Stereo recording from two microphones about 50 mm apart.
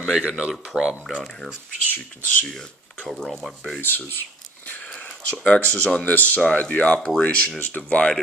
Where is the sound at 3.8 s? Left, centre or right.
Left.